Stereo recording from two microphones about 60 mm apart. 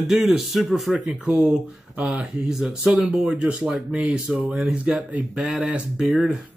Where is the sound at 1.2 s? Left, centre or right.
Centre.